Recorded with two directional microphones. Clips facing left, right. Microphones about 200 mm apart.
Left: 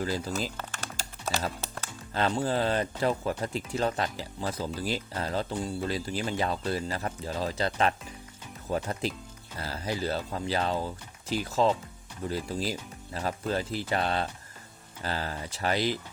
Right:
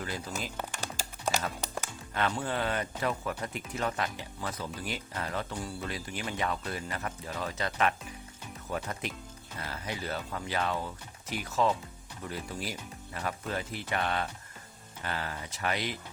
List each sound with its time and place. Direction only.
0.5 s music: 15° right (ahead or behind)
2.1 s speech: 30° left (ahead or behind)